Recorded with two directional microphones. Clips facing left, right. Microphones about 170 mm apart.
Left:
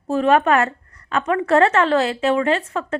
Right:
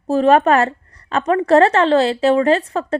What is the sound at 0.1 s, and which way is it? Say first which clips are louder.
Speech: right 3 dB; 35° right (ahead or behind).